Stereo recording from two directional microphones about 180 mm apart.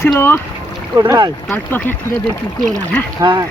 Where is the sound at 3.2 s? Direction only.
20° right (ahead or behind).